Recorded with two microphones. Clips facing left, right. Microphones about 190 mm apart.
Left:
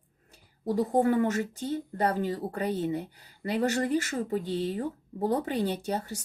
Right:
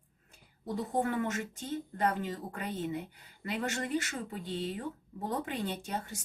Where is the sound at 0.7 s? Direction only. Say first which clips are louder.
Left 8 dB; 40° left (ahead or behind).